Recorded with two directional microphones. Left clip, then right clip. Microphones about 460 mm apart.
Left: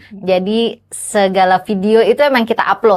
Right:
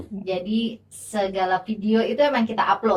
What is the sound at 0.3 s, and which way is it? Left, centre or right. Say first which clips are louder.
A woman's voice: left 13 dB; left.